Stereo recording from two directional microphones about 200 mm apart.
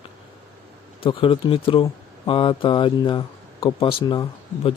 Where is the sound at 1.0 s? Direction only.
25° left (ahead or behind).